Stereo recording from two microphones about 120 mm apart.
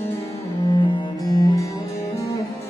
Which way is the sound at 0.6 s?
40° left (ahead or behind).